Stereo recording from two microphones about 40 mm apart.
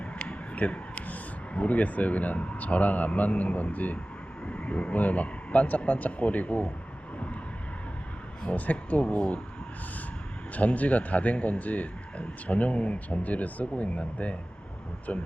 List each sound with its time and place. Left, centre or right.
0.0 s speech: left
4.4 s speech: left
8.4 s speech: left
10.5 s speech: left